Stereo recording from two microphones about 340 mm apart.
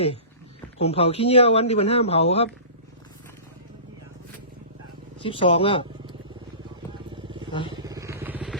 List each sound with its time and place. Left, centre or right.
0.8 s speech: centre
5.2 s speech: centre
7.1 s vehicle: centre